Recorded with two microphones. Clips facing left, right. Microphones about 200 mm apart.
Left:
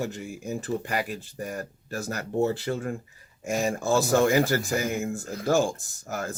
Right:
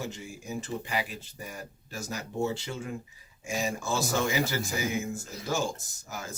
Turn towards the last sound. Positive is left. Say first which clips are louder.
# left 8 dB
turn(degrees=55)  # may be behind; listen again after turning